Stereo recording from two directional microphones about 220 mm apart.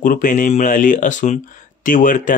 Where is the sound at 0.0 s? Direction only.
40° left (ahead or behind).